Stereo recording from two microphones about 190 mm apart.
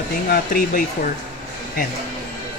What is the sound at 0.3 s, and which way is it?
Speech, 50° left (ahead or behind).